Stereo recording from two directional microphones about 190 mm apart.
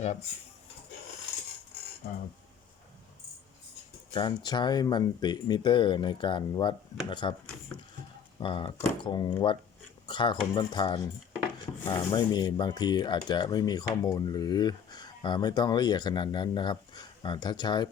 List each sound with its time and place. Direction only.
2.0 s speech: 55° left (ahead or behind)
4.1 s speech: 25° left (ahead or behind)
8.4 s speech: 25° left (ahead or behind)